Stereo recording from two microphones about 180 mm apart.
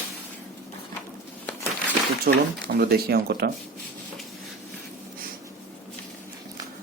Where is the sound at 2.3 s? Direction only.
65° right (ahead or behind).